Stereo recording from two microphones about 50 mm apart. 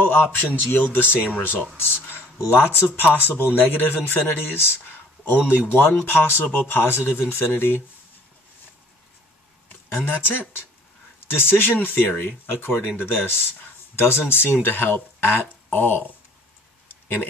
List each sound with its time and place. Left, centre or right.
0.0 s a man's voice: left
10.0 s speech: left